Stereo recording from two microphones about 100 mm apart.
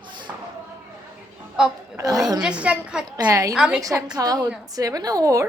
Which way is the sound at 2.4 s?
10° right (ahead or behind).